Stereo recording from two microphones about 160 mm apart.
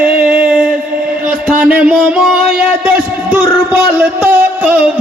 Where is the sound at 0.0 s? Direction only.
10° right (ahead or behind).